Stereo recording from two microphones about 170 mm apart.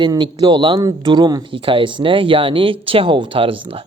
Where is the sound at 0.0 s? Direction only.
25° right (ahead or behind).